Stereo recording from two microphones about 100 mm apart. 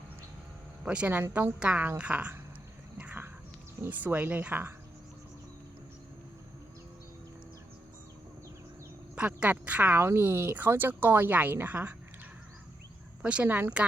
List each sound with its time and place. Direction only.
0.9 s speech: 15° right (ahead or behind)
3.0 s a sound: 10° right (ahead or behind)
3.8 s speech: 15° right (ahead or behind)
9.1 s speech: 15° right (ahead or behind)
13.2 s speech: 15° right (ahead or behind)